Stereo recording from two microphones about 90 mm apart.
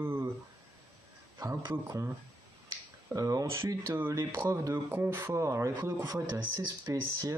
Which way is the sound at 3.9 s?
30° right (ahead or behind).